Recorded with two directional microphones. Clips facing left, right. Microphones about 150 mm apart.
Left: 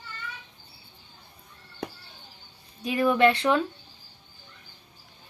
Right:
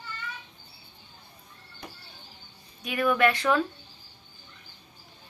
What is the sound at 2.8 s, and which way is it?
Speech, 30° left (ahead or behind).